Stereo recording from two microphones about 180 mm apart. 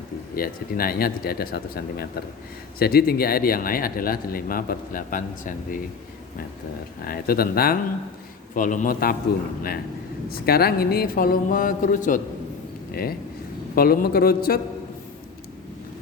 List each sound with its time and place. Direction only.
0.3 s a man's voice: 55° left (ahead or behind)
7.0 s a man's voice: 55° left (ahead or behind)
8.5 s speech: 45° left (ahead or behind)
10.2 s a man's voice: 60° left (ahead or behind)
12.9 s a man's voice: 55° left (ahead or behind)